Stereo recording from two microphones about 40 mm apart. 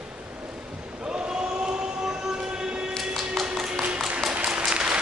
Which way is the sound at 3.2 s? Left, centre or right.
Centre.